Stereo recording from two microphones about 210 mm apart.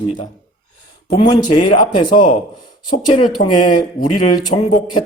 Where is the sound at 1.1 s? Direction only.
20° left (ahead or behind).